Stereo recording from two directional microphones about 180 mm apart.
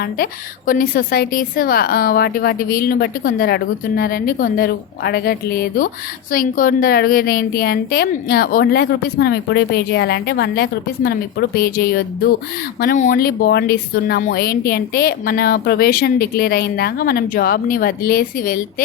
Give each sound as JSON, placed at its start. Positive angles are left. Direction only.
{"t": 0.0, "sound": "a woman's voice", "side_deg": 50}
{"t": 12.8, "sound": "a woman's voice", "side_deg": 50}